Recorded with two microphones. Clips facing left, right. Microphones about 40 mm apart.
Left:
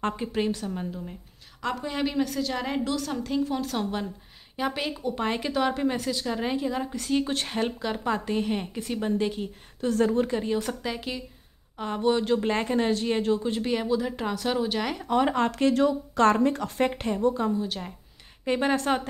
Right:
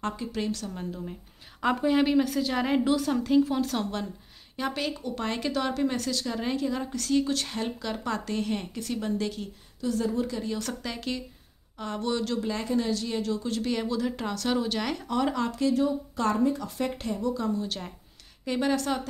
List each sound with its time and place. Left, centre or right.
0.0 s a woman's voice: left
1.6 s a woman's voice: centre; by 9.5 s left
9.8 s a woman's voice: left
10.6 s a woman's voice: centre
12.4 s speech: left; by 15.0 s centre
15.0 s a woman's voice: left
15.5 s speech: left
17.6 s speech: centre
18.4 s a woman's voice: left